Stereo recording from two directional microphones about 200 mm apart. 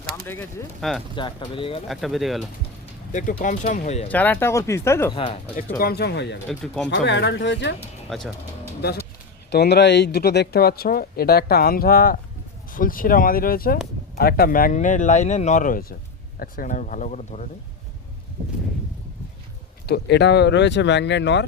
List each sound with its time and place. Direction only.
0.0 s a sound: 45° right (ahead or behind)
0.3 s speech: 10° left (ahead or behind)
1.1 s speech: 25° left (ahead or behind)
1.9 s speech: centre (ahead or behind)
3.1 s speech: 40° left (ahead or behind)
4.1 s speech: 10° left (ahead or behind)
5.1 s speech: 25° left (ahead or behind)
5.8 s speech: 55° left (ahead or behind)
6.5 s speech: centre (ahead or behind)
6.8 s speech: 65° left (ahead or behind)
8.1 s speech: centre (ahead or behind)
9.5 s speech: 55° left (ahead or behind); by 17.5 s 35° left (ahead or behind)
19.9 s speech: 60° left (ahead or behind)